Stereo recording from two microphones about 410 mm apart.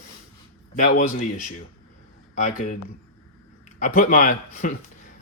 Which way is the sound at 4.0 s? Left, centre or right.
Centre.